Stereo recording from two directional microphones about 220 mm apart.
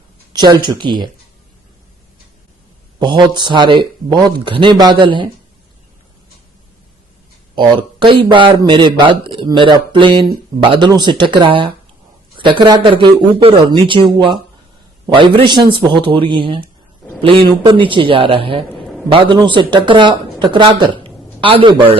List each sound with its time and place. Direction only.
0.3 s speech: 20° right (ahead or behind)
3.0 s speech: 20° right (ahead or behind)
7.5 s speech: 20° right (ahead or behind)